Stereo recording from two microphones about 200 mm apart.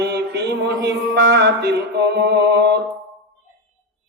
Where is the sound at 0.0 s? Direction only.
55° right (ahead or behind).